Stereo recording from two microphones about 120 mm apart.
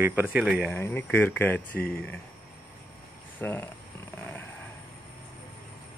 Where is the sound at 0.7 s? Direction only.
20° left (ahead or behind).